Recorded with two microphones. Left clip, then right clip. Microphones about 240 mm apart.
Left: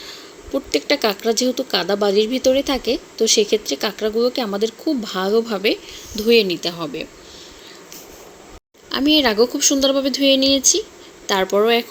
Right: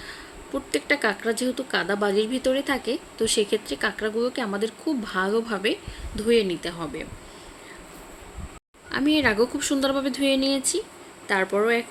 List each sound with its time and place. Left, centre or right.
0.0 s speech: centre
8.9 s speech: centre